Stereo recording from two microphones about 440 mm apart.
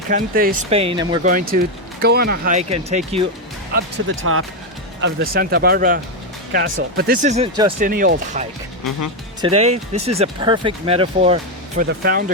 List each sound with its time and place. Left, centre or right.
0.1 s speech: centre
4.2 s speech: right